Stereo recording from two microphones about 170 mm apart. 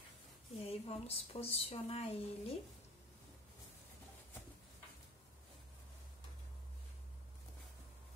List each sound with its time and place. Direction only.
0.6 s a woman's voice: 35° left (ahead or behind)